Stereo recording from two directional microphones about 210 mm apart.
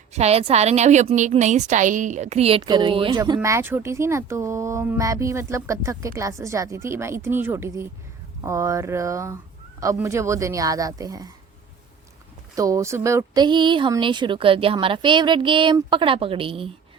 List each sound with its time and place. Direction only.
0.1 s a woman's voice: 30° right (ahead or behind)
12.5 s speech: 15° right (ahead or behind)